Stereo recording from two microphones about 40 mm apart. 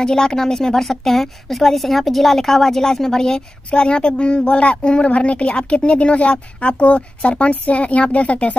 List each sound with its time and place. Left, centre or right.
0.0 s a woman's voice: centre; by 8.5 s left